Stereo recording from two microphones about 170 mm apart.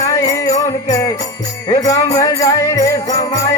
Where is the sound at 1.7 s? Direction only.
20° left (ahead or behind).